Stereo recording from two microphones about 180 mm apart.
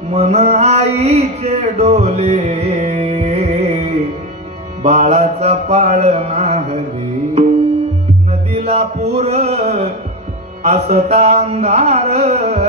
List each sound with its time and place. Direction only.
0.1 s a sound: 40° right (ahead or behind)
4.8 s mantra: 40° right (ahead or behind)
8.6 s music: 35° right (ahead or behind)
10.6 s carnatic music: 35° right (ahead or behind)